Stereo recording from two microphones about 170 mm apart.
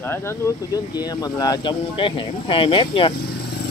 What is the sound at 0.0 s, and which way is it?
Speech, 15° left (ahead or behind).